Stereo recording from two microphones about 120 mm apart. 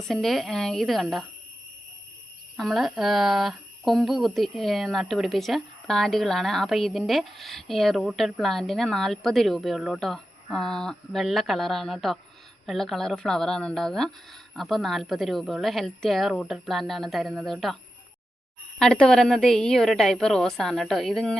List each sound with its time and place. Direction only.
0.1 s speech: centre (ahead or behind)
2.6 s speech: centre (ahead or behind)
18.8 s speech: 5° left (ahead or behind)